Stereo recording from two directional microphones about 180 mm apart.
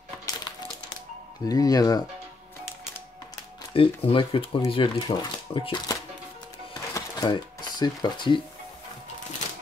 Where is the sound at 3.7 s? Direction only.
30° left (ahead or behind).